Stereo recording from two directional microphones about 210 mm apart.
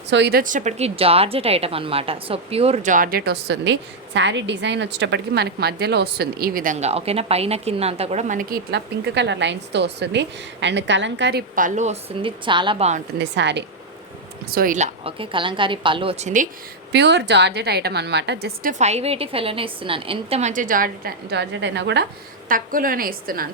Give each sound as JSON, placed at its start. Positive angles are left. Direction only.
{"t": 0.1, "sound": "a woman's voice", "side_deg": -55}
{"t": 13.1, "sound": "a woman's voice", "side_deg": -55}
{"t": 14.5, "sound": "a woman's voice", "side_deg": -40}
{"t": 16.9, "sound": "a woman's voice", "side_deg": -55}
{"t": 18.7, "sound": "a woman's voice", "side_deg": -30}
{"t": 22.4, "sound": "a woman's voice", "side_deg": -40}